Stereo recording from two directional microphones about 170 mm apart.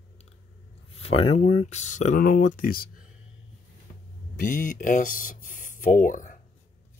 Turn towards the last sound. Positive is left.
turn(degrees=50)  # may be behind; listen again after turning